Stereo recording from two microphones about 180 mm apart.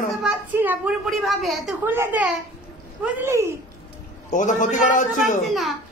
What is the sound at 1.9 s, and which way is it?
A woman's voice, 10° right (ahead or behind).